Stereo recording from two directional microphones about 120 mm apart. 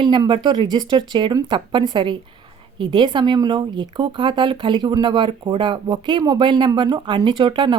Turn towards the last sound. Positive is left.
turn(degrees=-45)  # may be behind; listen again after turning